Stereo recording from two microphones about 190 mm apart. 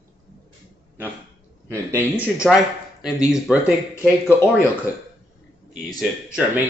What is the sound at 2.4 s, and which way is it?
Speech, centre (ahead or behind).